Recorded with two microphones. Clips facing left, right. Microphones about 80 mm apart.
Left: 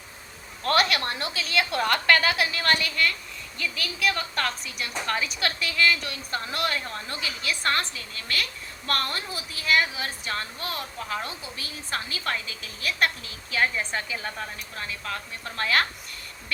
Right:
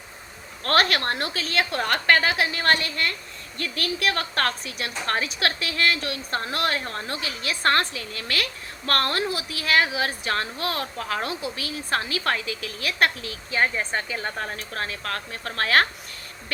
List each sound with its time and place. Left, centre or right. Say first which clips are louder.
0.6 s a woman's voice: right 2 dB; right
3.6 s a woman's voice: right 2 dB; right
10.1 s a woman's voice: right 5 dB; right
13.5 s a woman's voice: right 2 dB; right